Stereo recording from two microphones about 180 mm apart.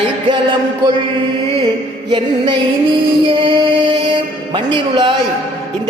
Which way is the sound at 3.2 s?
30° right (ahead or behind).